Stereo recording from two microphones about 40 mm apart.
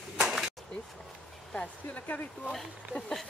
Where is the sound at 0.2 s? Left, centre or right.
Centre.